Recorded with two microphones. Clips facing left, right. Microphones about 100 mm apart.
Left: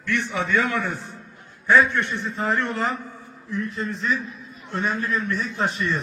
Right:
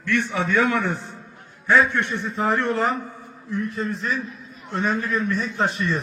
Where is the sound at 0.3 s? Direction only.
15° right (ahead or behind).